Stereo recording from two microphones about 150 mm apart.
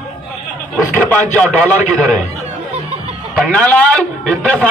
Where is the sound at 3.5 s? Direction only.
5° left (ahead or behind).